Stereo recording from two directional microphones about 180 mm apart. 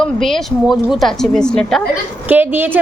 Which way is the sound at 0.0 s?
Centre (ahead or behind).